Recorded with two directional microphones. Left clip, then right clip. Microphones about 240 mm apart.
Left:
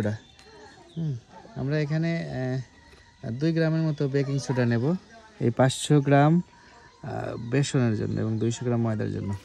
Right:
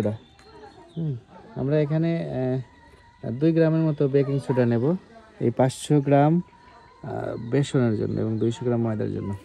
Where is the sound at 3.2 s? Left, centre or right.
Left.